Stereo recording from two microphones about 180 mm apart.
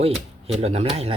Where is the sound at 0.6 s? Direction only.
35° right (ahead or behind).